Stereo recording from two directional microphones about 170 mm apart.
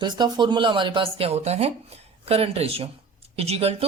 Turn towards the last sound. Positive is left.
turn(degrees=-35)  # may be behind; listen again after turning